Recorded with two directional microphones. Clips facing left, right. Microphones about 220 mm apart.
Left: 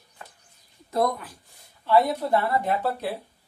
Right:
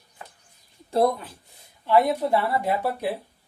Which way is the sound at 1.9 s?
10° right (ahead or behind).